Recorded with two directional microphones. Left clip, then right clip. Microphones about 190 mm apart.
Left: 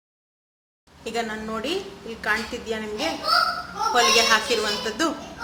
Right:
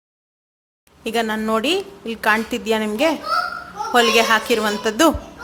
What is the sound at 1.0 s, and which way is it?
A woman's voice, 55° right (ahead or behind).